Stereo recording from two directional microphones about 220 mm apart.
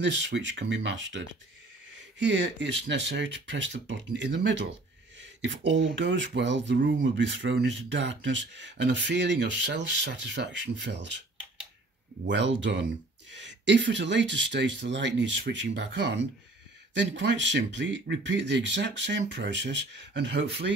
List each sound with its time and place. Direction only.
0.0 s speech: 55° right (ahead or behind)
5.7 s speech: 55° right (ahead or behind)
12.3 s speech: 55° right (ahead or behind)